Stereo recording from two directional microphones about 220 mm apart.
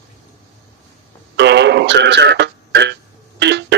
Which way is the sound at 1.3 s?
50° right (ahead or behind).